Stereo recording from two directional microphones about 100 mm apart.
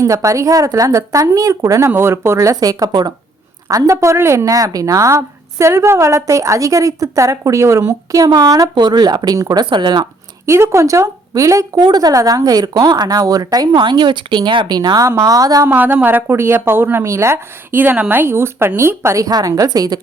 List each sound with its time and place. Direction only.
0.0 s speech: 30° right (ahead or behind)
9.6 s speech: 50° right (ahead or behind)
10.4 s speech: 25° right (ahead or behind)
15.6 s speech: 20° right (ahead or behind)
19.2 s speech: 40° right (ahead or behind)